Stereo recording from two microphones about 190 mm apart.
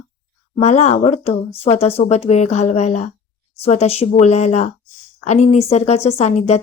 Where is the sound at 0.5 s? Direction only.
35° left (ahead or behind).